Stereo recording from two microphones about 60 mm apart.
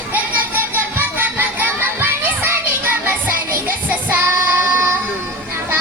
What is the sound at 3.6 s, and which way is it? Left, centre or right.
Child singing, right.